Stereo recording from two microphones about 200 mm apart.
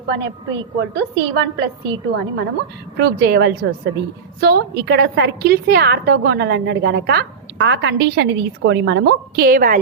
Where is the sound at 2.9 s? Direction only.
55° right (ahead or behind).